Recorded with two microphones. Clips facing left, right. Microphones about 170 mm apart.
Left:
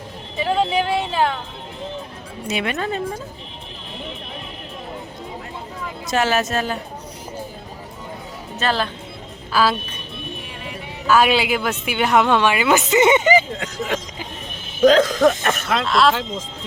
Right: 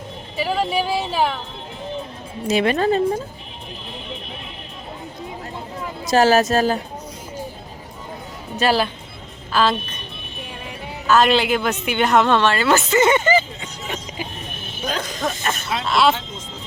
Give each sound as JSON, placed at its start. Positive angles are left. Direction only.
{"t": 0.3, "sound": "speech", "side_deg": -5}
{"t": 2.5, "sound": "speech", "side_deg": -35}
{"t": 6.1, "sound": "speech", "side_deg": -35}
{"t": 8.5, "sound": "speech", "side_deg": -10}
{"t": 9.5, "sound": "a woman's voice", "side_deg": 5}
{"t": 11.0, "sound": "a woman's voice", "side_deg": 10}
{"t": 13.6, "sound": "speech", "side_deg": 90}
{"t": 15.9, "sound": "speech", "side_deg": 0}